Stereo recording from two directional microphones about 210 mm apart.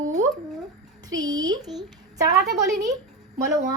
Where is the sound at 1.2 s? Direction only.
20° right (ahead or behind).